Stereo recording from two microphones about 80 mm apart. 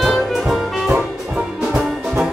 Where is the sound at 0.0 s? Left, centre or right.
Centre.